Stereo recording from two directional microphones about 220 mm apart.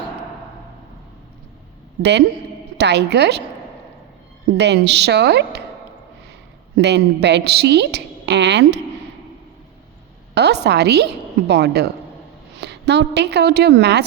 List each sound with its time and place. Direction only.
2.0 s a woman's voice: 50° right (ahead or behind)
4.5 s a woman's voice: 50° right (ahead or behind)
6.7 s a woman's voice: 50° right (ahead or behind)
10.3 s a woman's voice: 50° right (ahead or behind)